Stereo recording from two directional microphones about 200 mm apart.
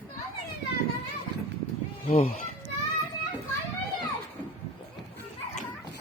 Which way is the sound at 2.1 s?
35° left (ahead or behind).